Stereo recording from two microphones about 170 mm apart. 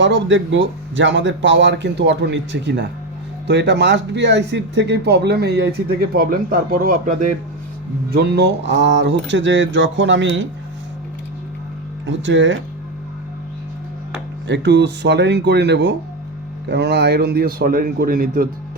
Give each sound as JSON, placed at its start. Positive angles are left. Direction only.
{"t": 0.0, "sound": "speech", "side_deg": -90}
{"t": 8.1, "sound": "speech", "side_deg": -70}
{"t": 12.0, "sound": "speech", "side_deg": -90}
{"t": 14.4, "sound": "a man's voice", "side_deg": -90}